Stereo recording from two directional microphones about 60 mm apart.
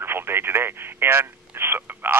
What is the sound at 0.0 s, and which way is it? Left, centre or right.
Speech, right.